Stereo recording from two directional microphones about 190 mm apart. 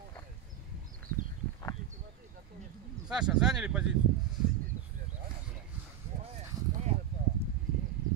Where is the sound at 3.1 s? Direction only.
5° right (ahead or behind).